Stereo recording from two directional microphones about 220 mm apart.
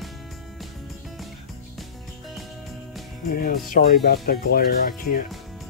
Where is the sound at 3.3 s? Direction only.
40° left (ahead or behind).